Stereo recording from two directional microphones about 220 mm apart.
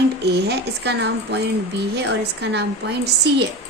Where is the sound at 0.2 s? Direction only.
50° right (ahead or behind).